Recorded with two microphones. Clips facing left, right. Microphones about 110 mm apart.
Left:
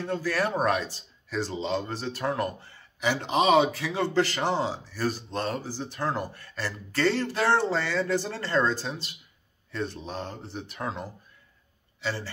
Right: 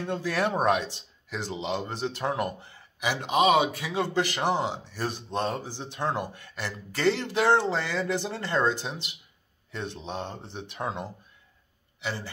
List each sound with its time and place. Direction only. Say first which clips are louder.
0.1 s speech: even; 15° right (ahead or behind)
3.0 s speech: right 1 dB; 10° right (ahead or behind)
12.0 s a man's voice: left 2 dB; 10° right (ahead or behind)